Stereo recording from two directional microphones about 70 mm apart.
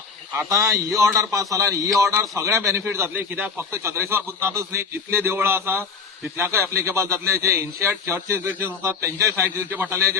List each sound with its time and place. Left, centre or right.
0.3 s a man's voice: right
3.2 s speech: right
3.7 s a man's voice: right